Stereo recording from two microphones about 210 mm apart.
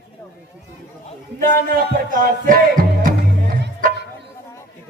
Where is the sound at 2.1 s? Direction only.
40° right (ahead or behind).